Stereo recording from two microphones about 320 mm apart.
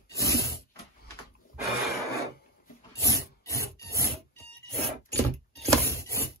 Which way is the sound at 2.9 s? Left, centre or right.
Centre.